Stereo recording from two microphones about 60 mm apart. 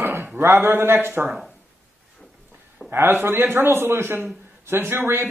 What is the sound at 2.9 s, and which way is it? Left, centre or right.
A man's voice, right.